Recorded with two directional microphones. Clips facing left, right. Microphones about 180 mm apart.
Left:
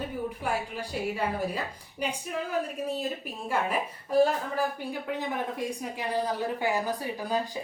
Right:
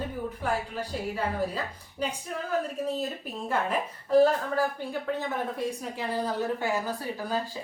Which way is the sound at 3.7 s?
10° left (ahead or behind).